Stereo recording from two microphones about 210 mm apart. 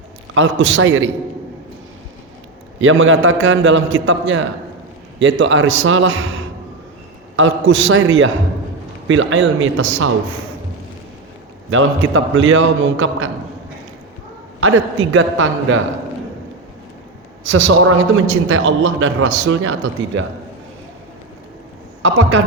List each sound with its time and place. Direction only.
0.3 s a man's voice: 65° right (ahead or behind)
2.8 s a man's voice: 70° right (ahead or behind)
7.3 s a man's voice: 65° right (ahead or behind)
11.7 s a man's voice: 70° right (ahead or behind)
14.6 s a man's voice: 70° right (ahead or behind)
17.4 s a man's voice: 60° right (ahead or behind)
22.0 s a man's voice: 70° right (ahead or behind)